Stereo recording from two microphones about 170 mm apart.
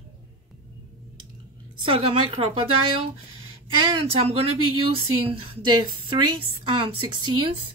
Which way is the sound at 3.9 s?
30° right (ahead or behind).